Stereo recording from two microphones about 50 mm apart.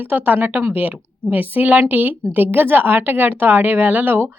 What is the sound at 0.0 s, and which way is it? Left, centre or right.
A woman's voice, right.